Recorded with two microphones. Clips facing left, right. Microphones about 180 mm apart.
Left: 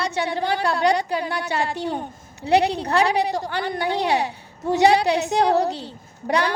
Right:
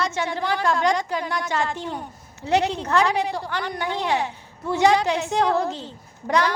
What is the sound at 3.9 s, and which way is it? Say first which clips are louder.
A woman's voice: left 2 dB; 15° left (ahead or behind).